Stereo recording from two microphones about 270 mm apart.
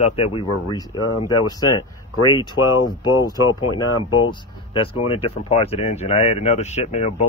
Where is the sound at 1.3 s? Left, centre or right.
Centre.